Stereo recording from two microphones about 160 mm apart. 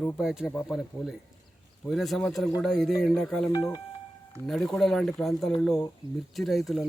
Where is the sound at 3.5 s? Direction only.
25° left (ahead or behind).